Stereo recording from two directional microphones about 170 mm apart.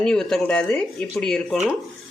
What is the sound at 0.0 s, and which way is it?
Speech, 5° left (ahead or behind).